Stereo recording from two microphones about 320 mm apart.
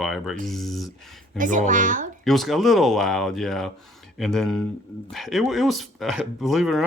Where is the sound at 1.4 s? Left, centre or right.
Right.